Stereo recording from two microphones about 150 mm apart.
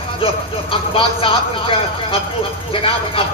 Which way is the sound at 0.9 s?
35° left (ahead or behind).